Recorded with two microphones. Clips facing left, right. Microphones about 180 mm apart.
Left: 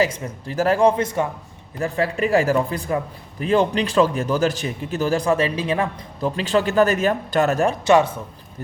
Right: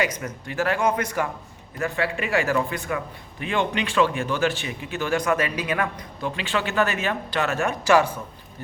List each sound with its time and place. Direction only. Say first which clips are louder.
0.0 s speech: left 4 dB; 35° left (ahead or behind)
1.8 s speech: left 4 dB; 35° left (ahead or behind)
7.9 s speech: left 2 dB; 20° left (ahead or behind)